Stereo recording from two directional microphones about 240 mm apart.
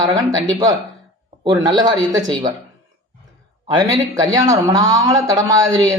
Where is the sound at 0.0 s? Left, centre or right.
Centre.